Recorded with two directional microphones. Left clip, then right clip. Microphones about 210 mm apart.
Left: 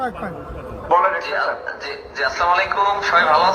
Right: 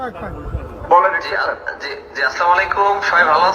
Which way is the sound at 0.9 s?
55° right (ahead or behind).